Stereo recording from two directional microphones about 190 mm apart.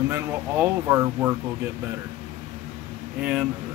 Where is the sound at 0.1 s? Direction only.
10° right (ahead or behind).